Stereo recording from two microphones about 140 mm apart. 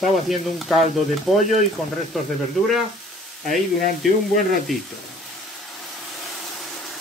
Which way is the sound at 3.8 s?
80° left.